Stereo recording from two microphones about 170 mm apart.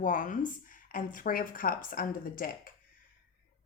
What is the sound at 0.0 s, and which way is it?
A woman's voice, 55° left (ahead or behind).